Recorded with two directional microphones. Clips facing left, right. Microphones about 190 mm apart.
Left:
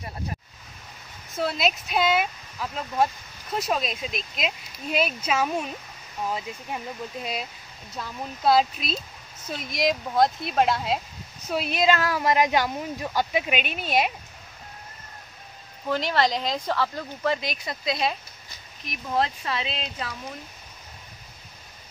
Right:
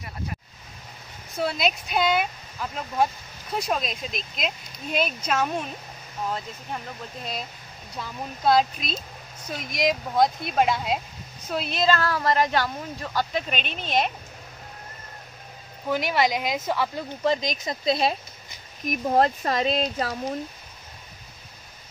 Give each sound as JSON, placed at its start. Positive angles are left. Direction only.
{"t": 1.3, "sound": "speech", "side_deg": 0}
{"t": 8.0, "sound": "speech", "side_deg": 0}
{"t": 15.9, "sound": "speech", "side_deg": -10}
{"t": 17.6, "sound": "speech", "side_deg": -30}
{"t": 18.9, "sound": "speech", "side_deg": -45}